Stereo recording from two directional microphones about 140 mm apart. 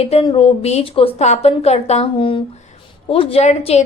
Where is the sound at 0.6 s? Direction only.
45° left (ahead or behind).